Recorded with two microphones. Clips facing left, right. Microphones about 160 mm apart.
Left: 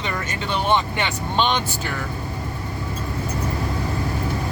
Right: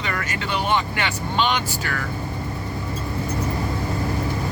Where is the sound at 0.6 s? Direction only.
20° left (ahead or behind).